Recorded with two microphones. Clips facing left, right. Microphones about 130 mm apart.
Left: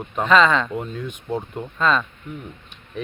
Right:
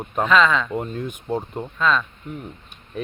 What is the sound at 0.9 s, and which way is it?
Speech, 45° right (ahead or behind).